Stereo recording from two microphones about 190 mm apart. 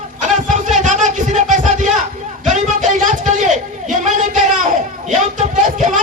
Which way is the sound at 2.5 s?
40° right (ahead or behind).